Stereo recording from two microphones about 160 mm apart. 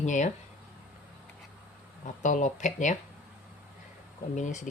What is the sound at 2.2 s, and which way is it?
Speech, 50° left (ahead or behind).